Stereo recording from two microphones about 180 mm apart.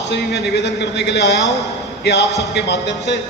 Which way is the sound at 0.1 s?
70° left (ahead or behind).